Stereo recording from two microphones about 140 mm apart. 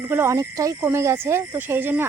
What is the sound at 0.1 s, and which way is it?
Speech, 20° right (ahead or behind).